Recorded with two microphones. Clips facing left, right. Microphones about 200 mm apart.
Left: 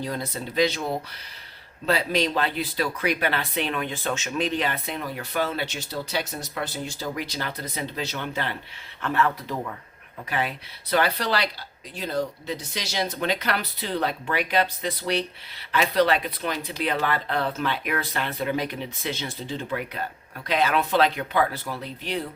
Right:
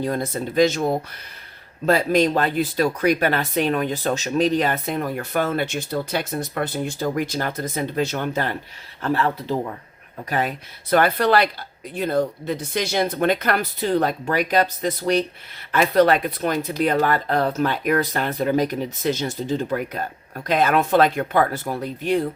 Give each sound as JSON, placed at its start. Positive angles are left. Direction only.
{"t": 0.0, "sound": "speech", "side_deg": -50}
{"t": 10.2, "sound": "speech", "side_deg": -45}